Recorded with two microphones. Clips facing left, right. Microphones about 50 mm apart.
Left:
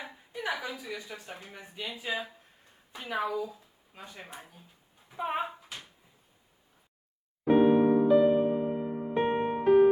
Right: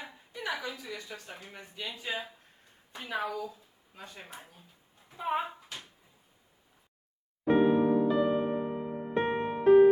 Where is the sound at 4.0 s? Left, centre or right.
Left.